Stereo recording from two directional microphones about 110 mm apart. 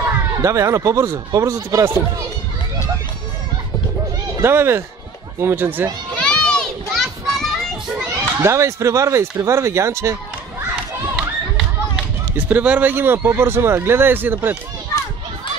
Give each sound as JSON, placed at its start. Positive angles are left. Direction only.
{"t": 0.0, "sound": "speech", "side_deg": -25}
{"t": 4.4, "sound": "speech", "side_deg": -20}
{"t": 6.1, "sound": "children playing", "side_deg": 10}
{"t": 8.1, "sound": "speech", "side_deg": -25}
{"t": 11.1, "sound": "run", "side_deg": 0}
{"t": 12.4, "sound": "speech", "side_deg": -15}